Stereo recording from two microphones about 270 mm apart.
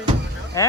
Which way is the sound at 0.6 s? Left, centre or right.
Centre.